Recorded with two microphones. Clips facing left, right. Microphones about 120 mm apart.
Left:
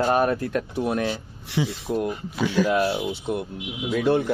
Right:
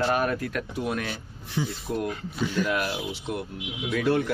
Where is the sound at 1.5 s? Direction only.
85° left.